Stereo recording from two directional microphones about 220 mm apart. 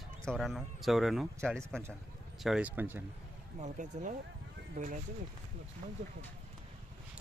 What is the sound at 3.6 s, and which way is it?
Speech, 35° right (ahead or behind).